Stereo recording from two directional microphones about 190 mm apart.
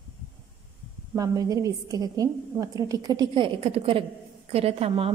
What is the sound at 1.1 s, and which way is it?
A woman's voice, 20° right (ahead or behind).